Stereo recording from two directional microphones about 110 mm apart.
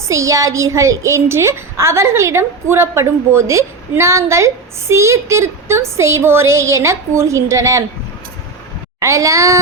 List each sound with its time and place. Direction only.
0.1 s a woman's voice: 30° right (ahead or behind)
9.0 s a woman's voice: 30° right (ahead or behind)